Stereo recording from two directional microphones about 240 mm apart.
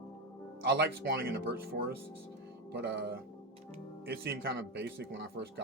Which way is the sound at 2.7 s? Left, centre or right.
Right.